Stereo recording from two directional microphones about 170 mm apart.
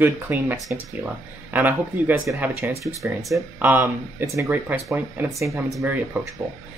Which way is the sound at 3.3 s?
10° right (ahead or behind).